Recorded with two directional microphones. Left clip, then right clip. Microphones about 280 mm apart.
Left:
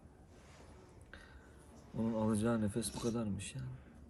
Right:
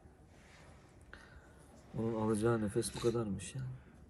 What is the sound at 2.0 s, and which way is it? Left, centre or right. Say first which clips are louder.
Speech: right 2 dB; centre.